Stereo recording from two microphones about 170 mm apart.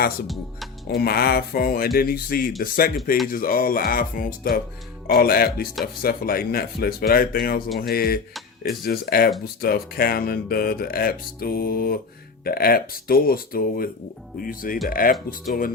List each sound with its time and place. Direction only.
0.9 s speech: 65° left (ahead or behind)